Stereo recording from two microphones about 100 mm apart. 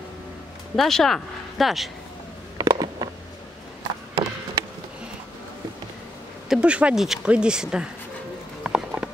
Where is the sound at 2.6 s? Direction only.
40° right (ahead or behind).